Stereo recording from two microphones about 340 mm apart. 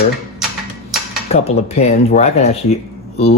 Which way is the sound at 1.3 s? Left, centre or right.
Centre.